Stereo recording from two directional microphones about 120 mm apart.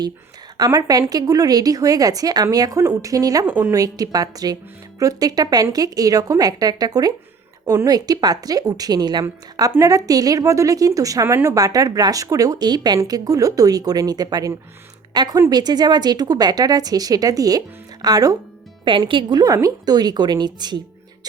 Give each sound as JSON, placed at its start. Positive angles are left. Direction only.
{"t": 0.5, "sound": "a woman's voice", "side_deg": -30}
{"t": 18.9, "sound": "speech", "side_deg": -45}
{"t": 19.5, "sound": "a woman's voice", "side_deg": -30}